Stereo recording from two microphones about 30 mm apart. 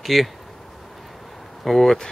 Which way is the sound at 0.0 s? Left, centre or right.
Centre.